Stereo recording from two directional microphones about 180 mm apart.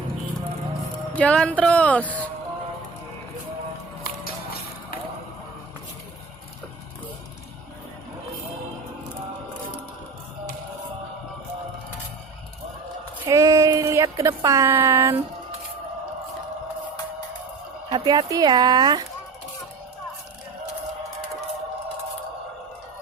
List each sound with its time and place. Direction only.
1.1 s speech: 5° left (ahead or behind)
13.2 s a sound: 20° right (ahead or behind)
17.9 s speech: 25° right (ahead or behind)